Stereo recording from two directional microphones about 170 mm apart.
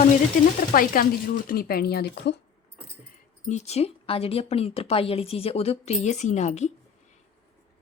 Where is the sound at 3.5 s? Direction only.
40° left (ahead or behind).